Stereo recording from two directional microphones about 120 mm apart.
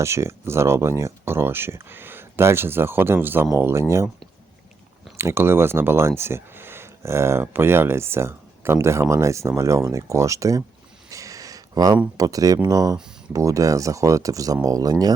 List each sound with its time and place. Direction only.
0.0 s speech: 25° right (ahead or behind)
5.1 s speech: 20° right (ahead or behind)
11.1 s a sound: 30° right (ahead or behind)
12.1 s speech: 30° right (ahead or behind)